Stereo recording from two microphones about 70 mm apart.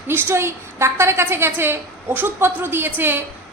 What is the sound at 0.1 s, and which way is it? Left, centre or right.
A woman's voice, right.